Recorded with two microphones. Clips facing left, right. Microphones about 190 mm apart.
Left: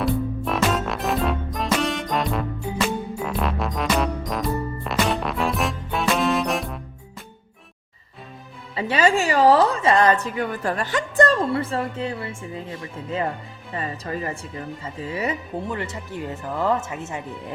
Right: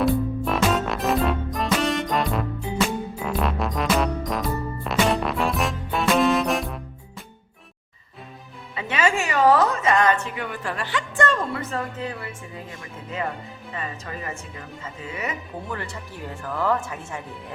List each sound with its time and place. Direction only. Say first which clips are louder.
0.0 s music: right 2 dB; centre (ahead or behind)
8.7 s music: left 4 dB; 35° left (ahead or behind)
13.7 s speech: left 5 dB; 35° left (ahead or behind)
15.8 s speech: left 4 dB; 20° left (ahead or behind)